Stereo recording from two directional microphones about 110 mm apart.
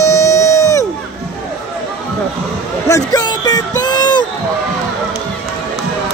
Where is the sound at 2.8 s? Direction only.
30° left (ahead or behind).